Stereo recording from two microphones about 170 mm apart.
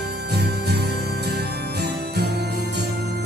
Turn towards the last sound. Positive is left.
turn(degrees=-80)